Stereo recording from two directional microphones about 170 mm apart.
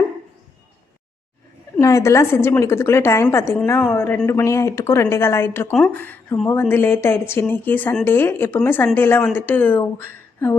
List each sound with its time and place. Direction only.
1.8 s speech: 15° left (ahead or behind)